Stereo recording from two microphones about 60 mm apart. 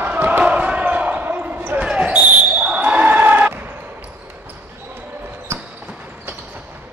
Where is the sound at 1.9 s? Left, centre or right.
Centre.